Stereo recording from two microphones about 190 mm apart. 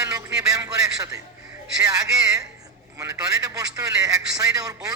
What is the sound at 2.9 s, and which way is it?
A man's voice, 15° right (ahead or behind).